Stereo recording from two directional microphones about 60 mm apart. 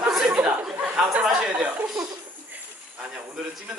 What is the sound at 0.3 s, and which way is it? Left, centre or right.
Chuckle, right.